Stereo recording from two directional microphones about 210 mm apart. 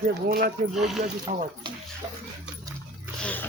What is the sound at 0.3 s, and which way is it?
Speech, 45° right (ahead or behind).